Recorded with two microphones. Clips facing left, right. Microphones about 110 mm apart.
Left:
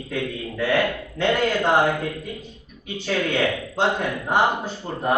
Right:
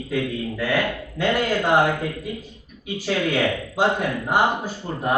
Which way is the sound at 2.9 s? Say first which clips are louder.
Right 1 dB; 5° right (ahead or behind).